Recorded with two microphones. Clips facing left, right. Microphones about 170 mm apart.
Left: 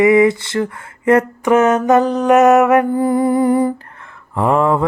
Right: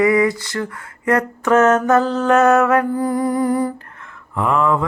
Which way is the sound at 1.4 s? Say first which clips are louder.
Even; 15° left (ahead or behind).